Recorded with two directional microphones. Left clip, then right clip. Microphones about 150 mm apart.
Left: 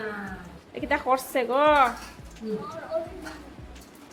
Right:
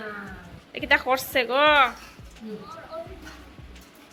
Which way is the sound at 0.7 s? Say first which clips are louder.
Right 3 dB; 5° left (ahead or behind).